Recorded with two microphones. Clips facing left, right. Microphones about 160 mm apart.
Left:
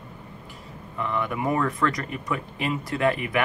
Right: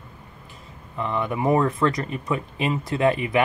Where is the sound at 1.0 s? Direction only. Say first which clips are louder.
Right 2 dB; 25° right (ahead or behind).